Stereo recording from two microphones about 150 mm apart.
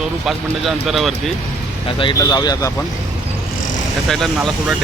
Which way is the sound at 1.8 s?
35° left (ahead or behind).